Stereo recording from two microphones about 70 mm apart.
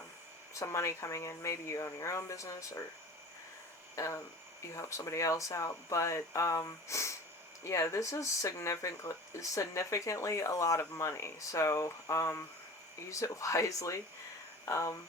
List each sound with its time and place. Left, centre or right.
0.6 s speech: left
3.9 s speech: left